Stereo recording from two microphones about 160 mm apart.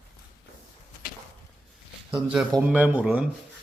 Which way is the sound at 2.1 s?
30° right (ahead or behind).